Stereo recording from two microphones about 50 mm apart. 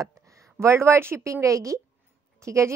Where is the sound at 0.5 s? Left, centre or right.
Right.